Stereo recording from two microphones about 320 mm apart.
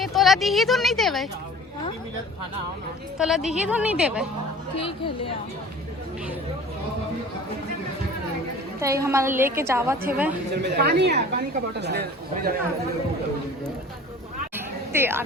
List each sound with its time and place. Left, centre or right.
0.0 s speech: centre
3.2 s a woman's voice: centre
4.8 s speech: centre
8.8 s a woman's voice: centre
10.6 s speech: right
14.5 s chatter: centre